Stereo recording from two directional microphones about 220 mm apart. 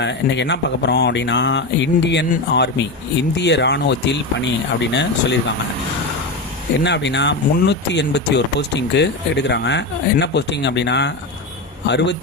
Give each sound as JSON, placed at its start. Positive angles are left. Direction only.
{"t": 0.0, "sound": "speech", "side_deg": 55}
{"t": 6.8, "sound": "speech", "side_deg": 55}